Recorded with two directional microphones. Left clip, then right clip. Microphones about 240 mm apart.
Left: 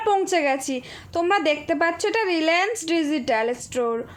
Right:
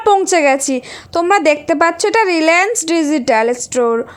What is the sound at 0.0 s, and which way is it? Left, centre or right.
A woman's voice, right.